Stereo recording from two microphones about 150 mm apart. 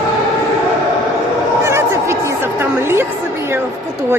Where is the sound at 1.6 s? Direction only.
15° right (ahead or behind).